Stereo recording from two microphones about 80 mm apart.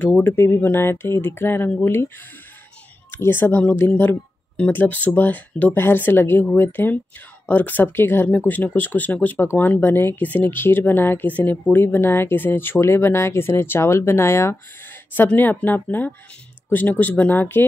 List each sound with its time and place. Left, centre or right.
0.0 s speech: left
3.1 s speech: left
15.1 s speech: left